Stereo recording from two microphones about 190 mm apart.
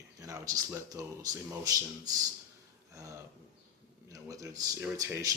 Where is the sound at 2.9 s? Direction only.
15° right (ahead or behind).